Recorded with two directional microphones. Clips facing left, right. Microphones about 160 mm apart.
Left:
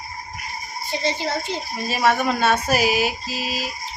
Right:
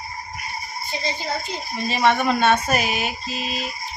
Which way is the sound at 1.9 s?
5° left (ahead or behind).